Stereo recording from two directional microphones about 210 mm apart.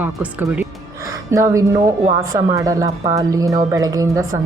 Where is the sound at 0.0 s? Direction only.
10° right (ahead or behind).